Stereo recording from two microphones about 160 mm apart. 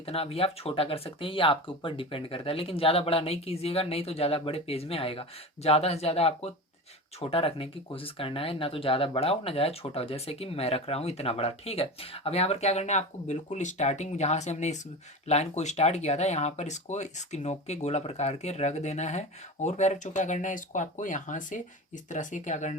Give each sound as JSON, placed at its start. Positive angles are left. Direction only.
{"t": 0.0, "sound": "speech", "side_deg": 40}